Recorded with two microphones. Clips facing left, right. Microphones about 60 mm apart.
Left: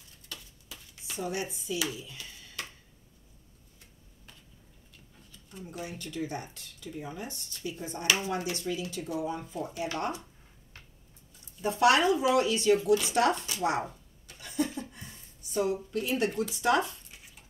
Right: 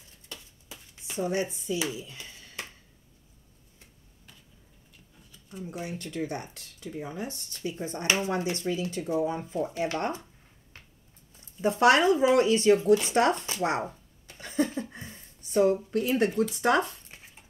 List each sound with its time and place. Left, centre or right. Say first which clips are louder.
0.3 s dishes: right 1 dB; right
2.1 s a sound: right 1 dB; right
5.5 s speech: right 5 dB; centre
5.8 s speech: right 3 dB; right
6.0 s speech: right 1 dB; right
11.6 s speech: right 3 dB; right
15.0 s a sound: right 4 dB; right